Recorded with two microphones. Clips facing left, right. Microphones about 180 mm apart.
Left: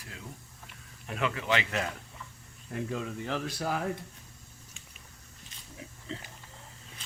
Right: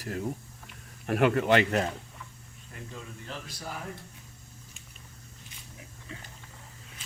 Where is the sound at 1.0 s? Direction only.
60° right (ahead or behind).